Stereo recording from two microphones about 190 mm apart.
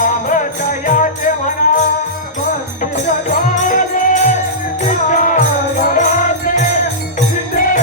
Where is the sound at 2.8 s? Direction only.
40° left (ahead or behind).